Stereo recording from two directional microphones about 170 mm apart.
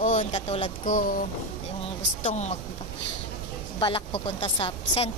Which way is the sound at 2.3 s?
45° left (ahead or behind).